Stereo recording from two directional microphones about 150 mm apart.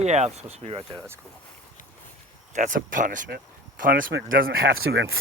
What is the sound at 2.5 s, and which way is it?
Speech, 60° right (ahead or behind).